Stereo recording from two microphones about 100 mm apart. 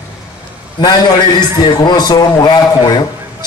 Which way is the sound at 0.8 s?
45° left (ahead or behind).